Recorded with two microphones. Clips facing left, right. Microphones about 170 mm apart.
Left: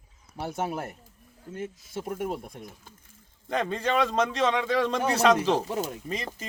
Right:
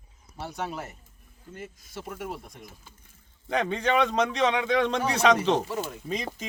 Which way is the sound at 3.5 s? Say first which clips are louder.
Right 1 dB; 5° left (ahead or behind).